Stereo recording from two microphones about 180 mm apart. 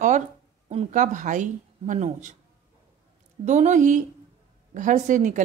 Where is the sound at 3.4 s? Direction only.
40° right (ahead or behind).